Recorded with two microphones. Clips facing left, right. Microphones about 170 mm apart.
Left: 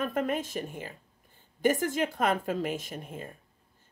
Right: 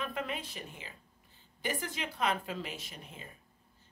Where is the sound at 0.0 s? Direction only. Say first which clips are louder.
Left 8 dB; 45° left (ahead or behind).